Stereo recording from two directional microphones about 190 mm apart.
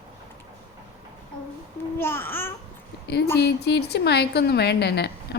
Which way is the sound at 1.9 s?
10° left (ahead or behind).